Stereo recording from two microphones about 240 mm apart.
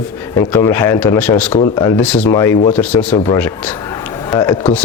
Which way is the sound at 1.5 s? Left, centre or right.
Left.